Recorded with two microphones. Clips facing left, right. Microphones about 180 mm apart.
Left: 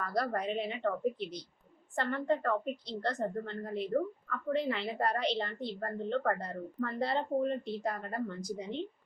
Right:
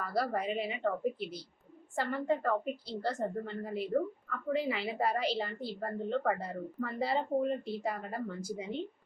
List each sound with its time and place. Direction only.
0.0 s a woman's voice: 5° right (ahead or behind)